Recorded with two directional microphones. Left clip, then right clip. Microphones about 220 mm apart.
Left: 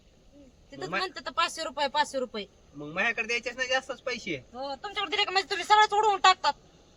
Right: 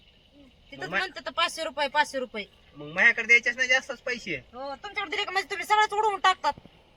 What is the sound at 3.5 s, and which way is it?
Speech, 20° left (ahead or behind).